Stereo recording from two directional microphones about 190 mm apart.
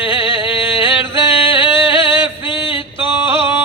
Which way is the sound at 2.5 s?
25° left (ahead or behind).